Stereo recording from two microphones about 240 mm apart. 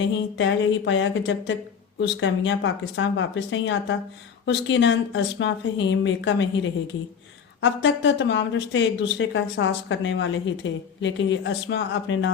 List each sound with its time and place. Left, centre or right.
0.3 s speech: left